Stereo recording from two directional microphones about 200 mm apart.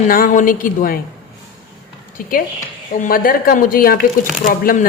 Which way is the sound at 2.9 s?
45° left (ahead or behind).